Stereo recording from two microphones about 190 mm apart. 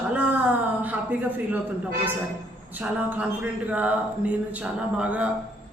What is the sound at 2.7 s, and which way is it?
Speech, 10° right (ahead or behind).